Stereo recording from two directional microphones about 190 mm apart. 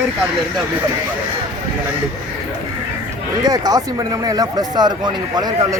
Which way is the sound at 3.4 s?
20° right (ahead or behind).